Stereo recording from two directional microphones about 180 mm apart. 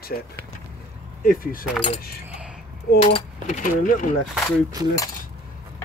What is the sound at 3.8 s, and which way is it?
Speech, 50° left (ahead or behind).